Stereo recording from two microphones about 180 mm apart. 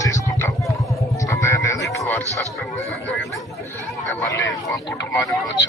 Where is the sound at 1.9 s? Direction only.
15° left (ahead or behind).